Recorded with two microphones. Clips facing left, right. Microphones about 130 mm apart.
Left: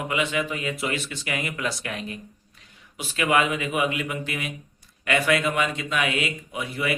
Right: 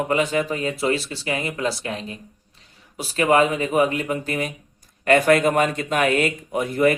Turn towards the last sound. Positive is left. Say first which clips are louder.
# right 9 dB
turn(degrees=-45)  # may be behind; listen again after turning